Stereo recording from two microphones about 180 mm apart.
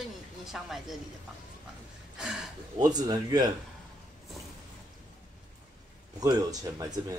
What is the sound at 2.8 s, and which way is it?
Speech, 20° right (ahead or behind).